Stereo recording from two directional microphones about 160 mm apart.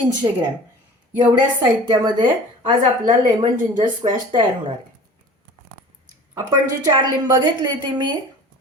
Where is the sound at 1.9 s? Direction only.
30° right (ahead or behind).